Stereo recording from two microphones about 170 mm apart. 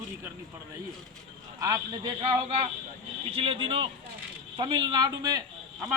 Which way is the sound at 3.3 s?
35° right (ahead or behind).